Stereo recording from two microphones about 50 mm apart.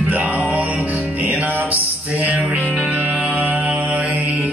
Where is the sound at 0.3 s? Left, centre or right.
Right.